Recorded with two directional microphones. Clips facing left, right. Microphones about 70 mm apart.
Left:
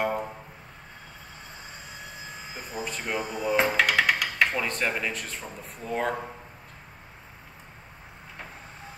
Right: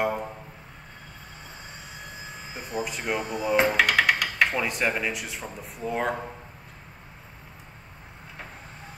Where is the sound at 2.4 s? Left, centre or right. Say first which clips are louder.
Right 4 dB; centre.